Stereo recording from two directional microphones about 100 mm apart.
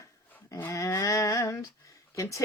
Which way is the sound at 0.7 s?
30° left (ahead or behind).